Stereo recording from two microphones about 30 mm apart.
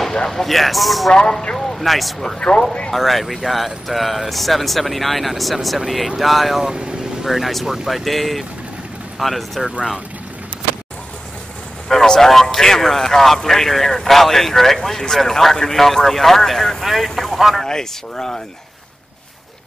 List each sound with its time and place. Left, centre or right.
0.3 s speech: centre
1.1 s speech: left
1.8 s speech: centre
7.6 s speech: centre
7.9 s speech: centre
11.9 s speech: centre
17.4 s speech: centre
17.6 s speech: left